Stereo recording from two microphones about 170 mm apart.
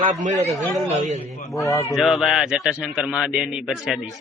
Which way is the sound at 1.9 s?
Centre (ahead or behind).